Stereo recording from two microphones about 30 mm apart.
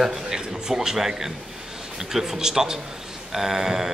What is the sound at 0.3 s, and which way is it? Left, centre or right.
A man's voice, centre.